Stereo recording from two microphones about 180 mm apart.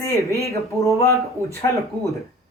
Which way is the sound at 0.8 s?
15° left (ahead or behind).